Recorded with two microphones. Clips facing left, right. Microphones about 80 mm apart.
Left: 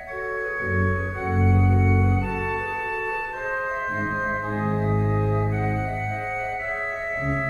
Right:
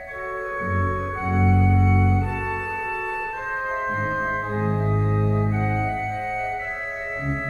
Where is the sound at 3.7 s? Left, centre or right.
Centre.